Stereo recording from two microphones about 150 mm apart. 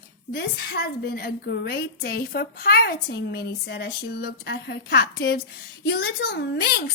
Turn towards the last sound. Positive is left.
turn(degrees=90)